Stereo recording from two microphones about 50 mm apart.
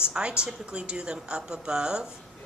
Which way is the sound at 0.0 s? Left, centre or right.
Centre.